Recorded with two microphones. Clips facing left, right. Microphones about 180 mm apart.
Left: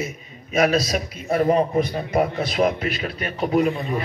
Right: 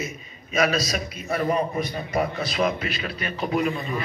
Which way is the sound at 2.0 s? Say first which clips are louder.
Left 4 dB; 55° left (ahead or behind).